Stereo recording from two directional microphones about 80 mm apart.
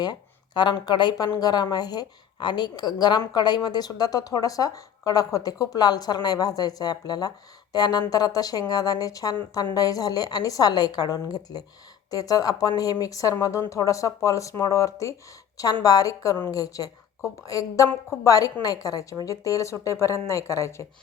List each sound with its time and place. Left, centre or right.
0.0 s speech: left